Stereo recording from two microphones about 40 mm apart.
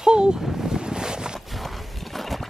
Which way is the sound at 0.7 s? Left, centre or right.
Centre.